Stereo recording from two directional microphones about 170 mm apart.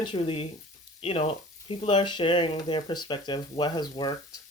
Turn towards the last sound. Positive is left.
turn(degrees=25)  # may be behind; listen again after turning